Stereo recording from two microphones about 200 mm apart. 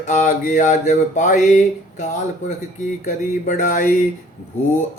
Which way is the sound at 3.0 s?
40° left (ahead or behind).